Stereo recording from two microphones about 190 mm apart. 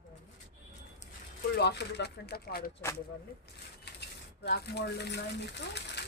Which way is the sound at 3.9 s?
60° left (ahead or behind).